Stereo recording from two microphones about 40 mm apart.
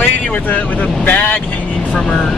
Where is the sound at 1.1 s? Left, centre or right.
Left.